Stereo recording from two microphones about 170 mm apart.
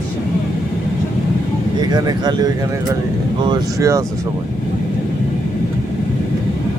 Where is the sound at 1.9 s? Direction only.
25° right (ahead or behind).